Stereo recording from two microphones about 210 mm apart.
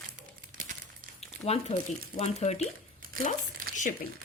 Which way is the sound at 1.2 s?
30° left (ahead or behind).